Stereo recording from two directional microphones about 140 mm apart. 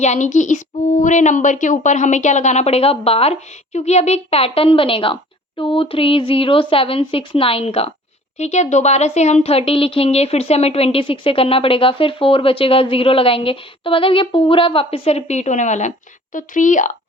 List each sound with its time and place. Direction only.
0.0 s speech: 60° left (ahead or behind)